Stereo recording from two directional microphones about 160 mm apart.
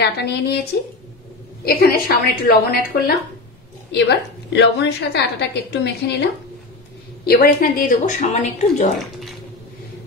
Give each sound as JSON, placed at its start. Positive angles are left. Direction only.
{"t": 0.0, "sound": "a woman's voice", "side_deg": 90}
{"t": 1.6, "sound": "a woman's voice", "side_deg": 70}
{"t": 4.5, "sound": "a woman's voice", "side_deg": 90}
{"t": 7.2, "sound": "a woman's voice", "side_deg": 70}